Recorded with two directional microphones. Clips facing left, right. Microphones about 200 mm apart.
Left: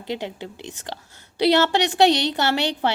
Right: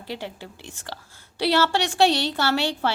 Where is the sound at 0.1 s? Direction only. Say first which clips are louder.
Left 5 dB; 20° left (ahead or behind).